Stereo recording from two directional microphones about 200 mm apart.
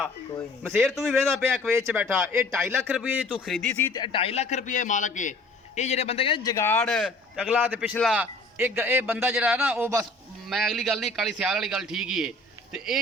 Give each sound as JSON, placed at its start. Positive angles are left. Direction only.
{"t": 0.7, "sound": "a man's voice", "side_deg": 0}
{"t": 1.7, "sound": "a man's voice", "side_deg": -10}
{"t": 3.9, "sound": "a man's voice", "side_deg": 25}
{"t": 6.8, "sound": "a man's voice", "side_deg": 0}
{"t": 10.5, "sound": "a man's voice", "side_deg": 0}